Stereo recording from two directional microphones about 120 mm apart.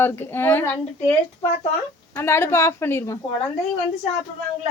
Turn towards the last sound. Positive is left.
turn(degrees=20)  # may be behind; listen again after turning